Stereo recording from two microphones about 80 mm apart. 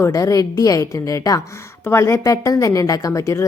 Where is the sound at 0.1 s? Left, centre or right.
Left.